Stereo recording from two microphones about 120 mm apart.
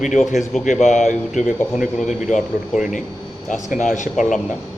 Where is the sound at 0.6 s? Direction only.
90° left.